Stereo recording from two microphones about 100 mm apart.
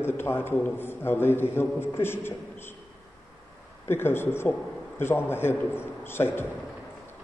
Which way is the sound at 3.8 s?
25° left (ahead or behind).